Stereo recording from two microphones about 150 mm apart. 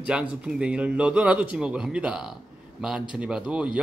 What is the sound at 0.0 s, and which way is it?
A man's voice, 10° right (ahead or behind).